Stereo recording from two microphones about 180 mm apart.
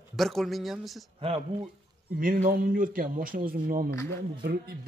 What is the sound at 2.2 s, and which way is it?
Speech, 50° right (ahead or behind).